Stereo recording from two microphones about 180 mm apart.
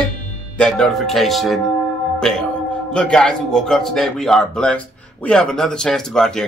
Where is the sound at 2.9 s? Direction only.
5° left (ahead or behind).